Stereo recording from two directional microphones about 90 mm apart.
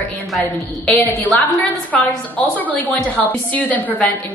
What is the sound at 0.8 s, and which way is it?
A woman's voice, 15° left (ahead or behind).